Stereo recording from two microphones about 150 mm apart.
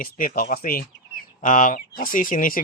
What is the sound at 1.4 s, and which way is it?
Speech, 55° left (ahead or behind).